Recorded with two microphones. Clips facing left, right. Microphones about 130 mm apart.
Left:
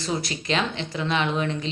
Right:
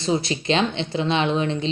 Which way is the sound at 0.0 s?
25° right (ahead or behind).